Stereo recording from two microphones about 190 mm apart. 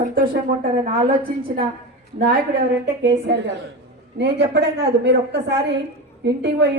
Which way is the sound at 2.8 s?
60° right (ahead or behind).